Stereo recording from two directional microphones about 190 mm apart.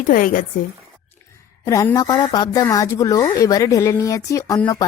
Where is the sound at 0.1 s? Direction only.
45° left (ahead or behind).